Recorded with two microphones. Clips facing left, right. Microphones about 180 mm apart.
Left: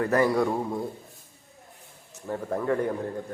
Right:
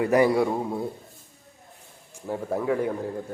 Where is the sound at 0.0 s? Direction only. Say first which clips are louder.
Right 3 dB; 15° right (ahead or behind).